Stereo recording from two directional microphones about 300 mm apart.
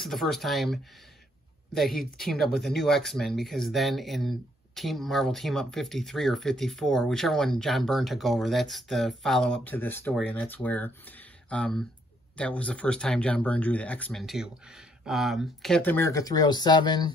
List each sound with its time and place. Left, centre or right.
0.0 s speech: centre